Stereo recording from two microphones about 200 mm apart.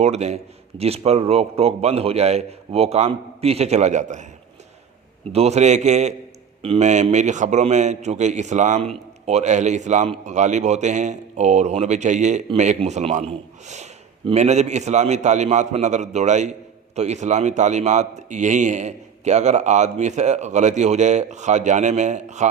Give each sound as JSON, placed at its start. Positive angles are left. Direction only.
{"t": 0.0, "sound": "a man's voice", "side_deg": -35}
{"t": 5.3, "sound": "a man's voice", "side_deg": -30}